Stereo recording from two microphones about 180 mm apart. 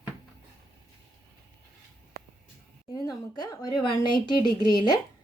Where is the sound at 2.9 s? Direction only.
20° left (ahead or behind).